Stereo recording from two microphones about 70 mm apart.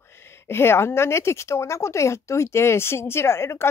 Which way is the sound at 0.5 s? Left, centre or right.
Left.